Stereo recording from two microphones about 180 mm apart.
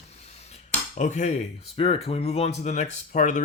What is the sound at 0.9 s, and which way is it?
Speech, 40° left (ahead or behind).